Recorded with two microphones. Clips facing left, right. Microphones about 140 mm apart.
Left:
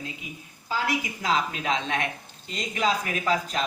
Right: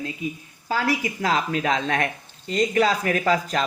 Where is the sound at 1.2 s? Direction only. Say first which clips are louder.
Right 3 dB; 45° right (ahead or behind).